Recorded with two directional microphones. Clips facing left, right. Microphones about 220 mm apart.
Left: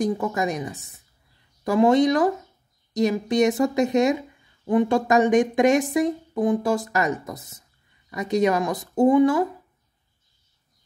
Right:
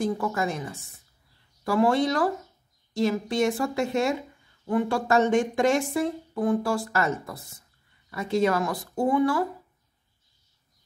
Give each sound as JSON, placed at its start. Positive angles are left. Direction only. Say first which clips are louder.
{"t": 0.0, "sound": "speech", "louder": "left 3 dB", "side_deg": 20}